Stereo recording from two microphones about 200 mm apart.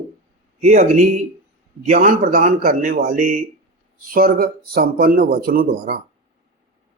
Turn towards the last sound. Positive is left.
turn(degrees=-45)  # may be behind; listen again after turning